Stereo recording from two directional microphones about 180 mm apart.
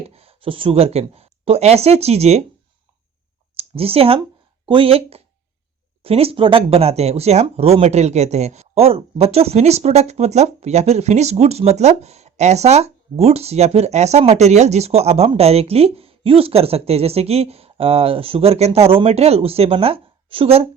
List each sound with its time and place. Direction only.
0.1 s a woman's voice: 35° right (ahead or behind)
3.5 s speech: 30° right (ahead or behind)